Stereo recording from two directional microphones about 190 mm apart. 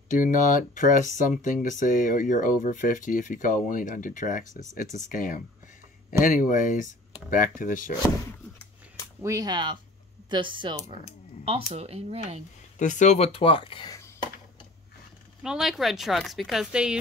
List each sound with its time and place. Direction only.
0.1 s speech: 45° left (ahead or behind)
9.2 s speech: 20° right (ahead or behind)
12.7 s speech: 40° left (ahead or behind); by 14.0 s 25° left (ahead or behind)
15.4 s speech: 5° right (ahead or behind)